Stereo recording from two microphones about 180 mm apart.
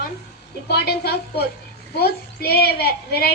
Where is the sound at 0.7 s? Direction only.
60° left (ahead or behind).